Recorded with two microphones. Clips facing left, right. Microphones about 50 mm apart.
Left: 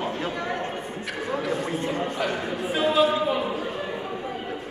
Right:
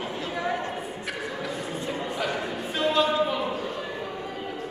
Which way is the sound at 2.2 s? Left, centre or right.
Centre.